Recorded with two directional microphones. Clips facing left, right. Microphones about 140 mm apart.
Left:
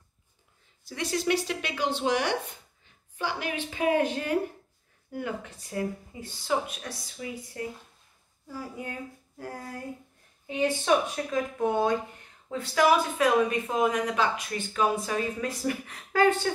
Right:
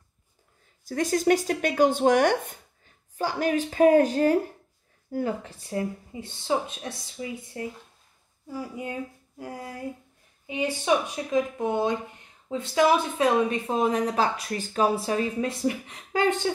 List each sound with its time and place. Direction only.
0.8 s speech: 45° right (ahead or behind); by 8.9 s 15° right (ahead or behind)
10.4 s speech: 10° right (ahead or behind)